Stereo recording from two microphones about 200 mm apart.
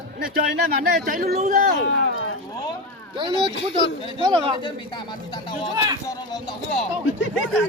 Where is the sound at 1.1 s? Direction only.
45° right (ahead or behind).